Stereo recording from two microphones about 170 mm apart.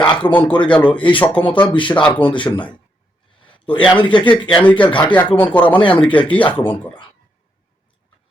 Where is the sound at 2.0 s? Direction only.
10° left (ahead or behind).